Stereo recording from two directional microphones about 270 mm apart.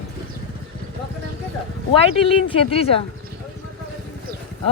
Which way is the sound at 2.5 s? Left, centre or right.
Left.